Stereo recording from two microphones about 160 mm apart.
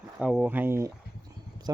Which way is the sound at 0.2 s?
5° right (ahead or behind).